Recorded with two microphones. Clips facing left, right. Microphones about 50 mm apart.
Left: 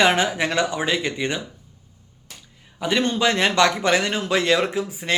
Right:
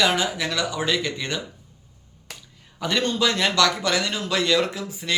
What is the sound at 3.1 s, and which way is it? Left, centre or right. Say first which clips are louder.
Speech: left 2 dB; left.